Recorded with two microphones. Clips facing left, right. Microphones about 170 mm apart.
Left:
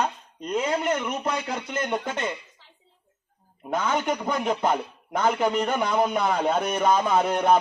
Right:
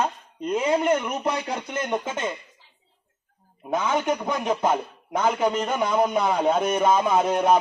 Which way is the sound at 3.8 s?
5° right (ahead or behind).